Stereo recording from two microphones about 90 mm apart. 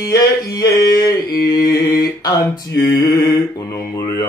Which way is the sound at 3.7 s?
30° left (ahead or behind).